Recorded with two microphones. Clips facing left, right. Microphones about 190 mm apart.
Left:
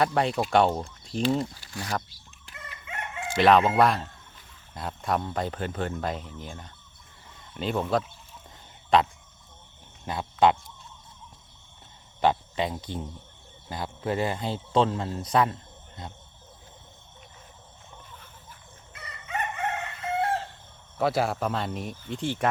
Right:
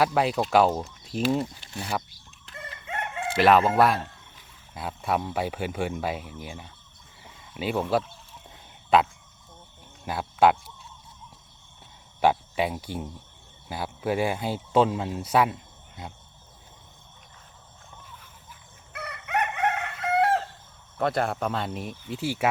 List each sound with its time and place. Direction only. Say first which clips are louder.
0.0 s speech: right 1 dB; 5° right (ahead or behind)
3.3 s speech: even; centre (ahead or behind)
7.3 s a sound: right 1 dB; 5° right (ahead or behind)
8.9 s speech: right 1 dB; 5° right (ahead or behind)
10.1 s speech: right 1 dB; 5° right (ahead or behind)
12.2 s speech: right 2 dB; 10° right (ahead or behind)
18.9 s chicken: right 5 dB; 65° right (ahead or behind)
21.0 s speech: even; 5° left (ahead or behind)